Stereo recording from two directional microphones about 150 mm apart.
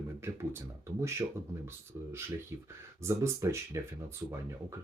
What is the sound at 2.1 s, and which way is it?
Speech, 15° right (ahead or behind).